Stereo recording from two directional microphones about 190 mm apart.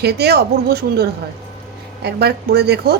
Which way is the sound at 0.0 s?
60° right (ahead or behind).